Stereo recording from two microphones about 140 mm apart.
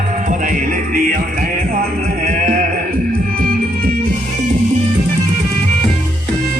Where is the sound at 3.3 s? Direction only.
90° right.